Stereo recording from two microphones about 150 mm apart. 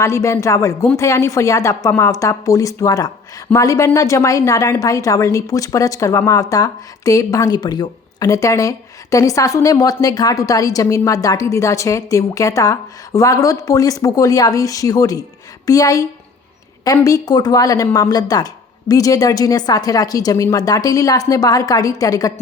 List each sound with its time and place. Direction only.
0.0 s a woman's voice: 20° left (ahead or behind)